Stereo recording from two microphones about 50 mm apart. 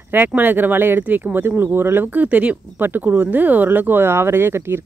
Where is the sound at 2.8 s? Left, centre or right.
Right.